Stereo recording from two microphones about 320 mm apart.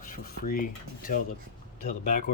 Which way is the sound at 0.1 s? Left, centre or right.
Left.